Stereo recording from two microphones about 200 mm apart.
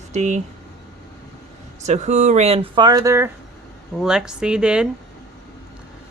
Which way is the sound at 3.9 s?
5° right (ahead or behind).